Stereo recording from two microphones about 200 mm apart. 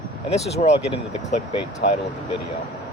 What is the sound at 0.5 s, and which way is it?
Speech, 35° left (ahead or behind).